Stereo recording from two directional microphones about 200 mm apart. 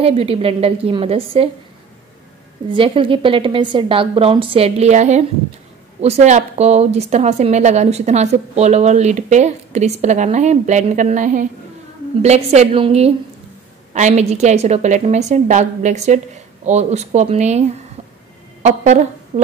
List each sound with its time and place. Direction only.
0.0 s a woman's voice: 30° right (ahead or behind)
2.7 s a woman's voice: 25° right (ahead or behind)